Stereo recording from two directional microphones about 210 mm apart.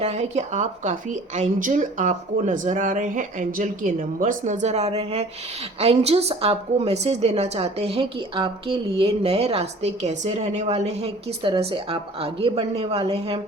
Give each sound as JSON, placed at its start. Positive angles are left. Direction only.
{"t": 0.0, "sound": "a woman's voice", "side_deg": -30}